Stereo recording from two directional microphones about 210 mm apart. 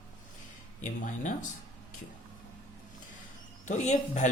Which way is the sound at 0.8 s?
35° left (ahead or behind).